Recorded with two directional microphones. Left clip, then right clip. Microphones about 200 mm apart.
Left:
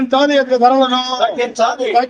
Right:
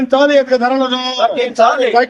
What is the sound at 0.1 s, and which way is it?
Speech, 5° right (ahead or behind).